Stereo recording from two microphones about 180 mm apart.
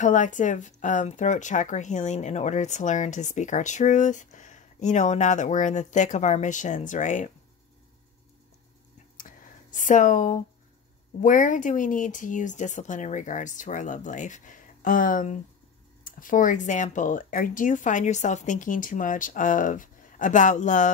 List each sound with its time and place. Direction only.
0.0 s speech: 45° left (ahead or behind)
9.2 s a sound: 45° left (ahead or behind)
11.2 s speech: 45° left (ahead or behind)